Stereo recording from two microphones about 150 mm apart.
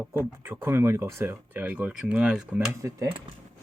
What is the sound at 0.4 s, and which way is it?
Speech, 15° right (ahead or behind).